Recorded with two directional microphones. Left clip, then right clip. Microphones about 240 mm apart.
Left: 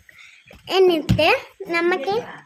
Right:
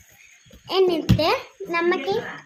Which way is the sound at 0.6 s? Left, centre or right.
Left.